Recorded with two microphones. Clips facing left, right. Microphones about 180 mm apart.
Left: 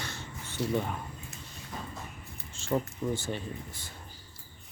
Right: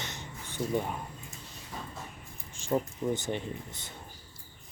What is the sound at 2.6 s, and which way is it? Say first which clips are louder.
Speech: right 1 dB; 15° right (ahead or behind).